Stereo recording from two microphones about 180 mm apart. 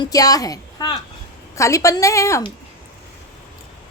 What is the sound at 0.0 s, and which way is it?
A woman's voice, 20° left (ahead or behind).